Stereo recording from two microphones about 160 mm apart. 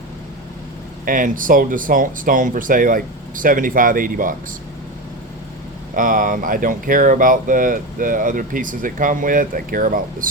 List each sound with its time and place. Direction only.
1.0 s speech: 60° right (ahead or behind)
5.9 s speech: 60° right (ahead or behind)